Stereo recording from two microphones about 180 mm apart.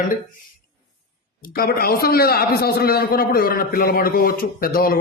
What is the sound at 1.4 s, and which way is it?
A man's voice, 55° left (ahead or behind).